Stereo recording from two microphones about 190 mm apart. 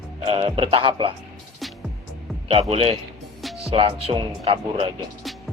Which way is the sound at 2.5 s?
30° right (ahead or behind).